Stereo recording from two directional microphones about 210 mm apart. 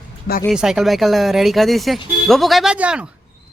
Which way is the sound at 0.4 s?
5° right (ahead or behind).